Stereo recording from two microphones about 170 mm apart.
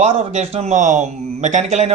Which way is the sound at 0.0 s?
35° right (ahead or behind).